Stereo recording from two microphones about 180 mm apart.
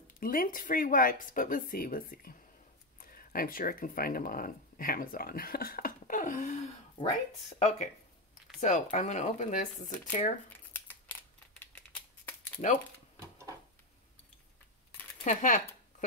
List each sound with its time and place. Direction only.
0.2 s speech: 55° left (ahead or behind)
10.7 s scissors: 10° left (ahead or behind)
11.6 s a sound: 10° left (ahead or behind)
15.2 s speech: 45° left (ahead or behind)